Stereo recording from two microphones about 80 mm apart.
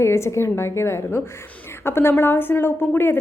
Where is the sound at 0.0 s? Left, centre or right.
Left.